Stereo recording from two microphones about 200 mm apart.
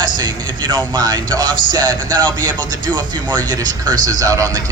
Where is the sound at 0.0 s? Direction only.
20° right (ahead or behind).